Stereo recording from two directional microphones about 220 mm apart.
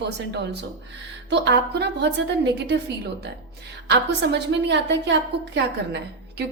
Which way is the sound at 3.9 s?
50° right (ahead or behind).